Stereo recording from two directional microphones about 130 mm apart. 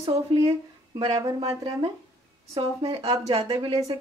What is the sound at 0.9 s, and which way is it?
Speech, 30° right (ahead or behind).